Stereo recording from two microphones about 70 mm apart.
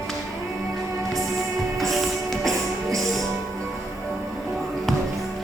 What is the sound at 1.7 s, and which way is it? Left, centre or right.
Music, centre.